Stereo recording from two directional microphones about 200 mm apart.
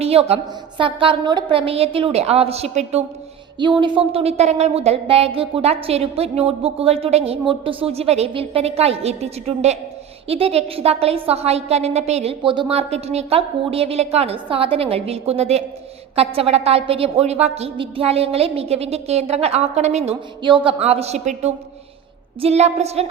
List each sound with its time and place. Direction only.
0.0 s a woman's voice: 30° right (ahead or behind)